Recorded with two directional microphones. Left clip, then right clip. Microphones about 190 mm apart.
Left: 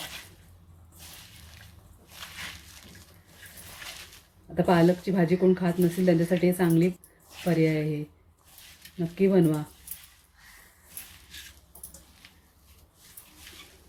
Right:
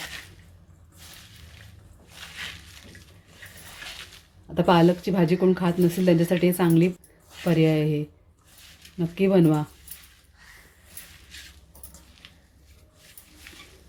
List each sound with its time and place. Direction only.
4.5 s speech: 25° right (ahead or behind)